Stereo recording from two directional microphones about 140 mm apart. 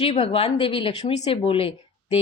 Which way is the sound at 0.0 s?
40° left (ahead or behind).